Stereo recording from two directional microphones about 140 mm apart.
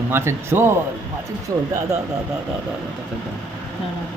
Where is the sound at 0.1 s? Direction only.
15° right (ahead or behind).